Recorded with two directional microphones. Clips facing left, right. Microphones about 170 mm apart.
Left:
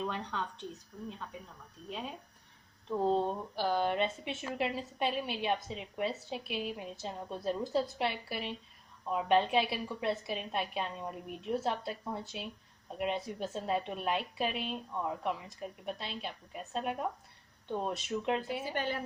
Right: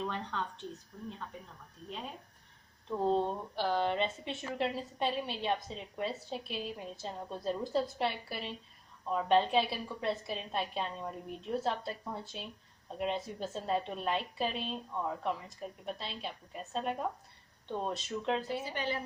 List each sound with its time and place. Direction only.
0.0 s a woman's voice: centre (ahead or behind)
2.9 s a woman's voice: centre (ahead or behind)
18.7 s a woman's voice: 50° left (ahead or behind)